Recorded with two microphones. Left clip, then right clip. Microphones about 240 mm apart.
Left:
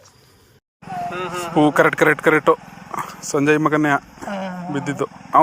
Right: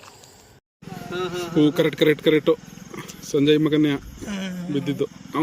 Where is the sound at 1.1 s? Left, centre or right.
Centre.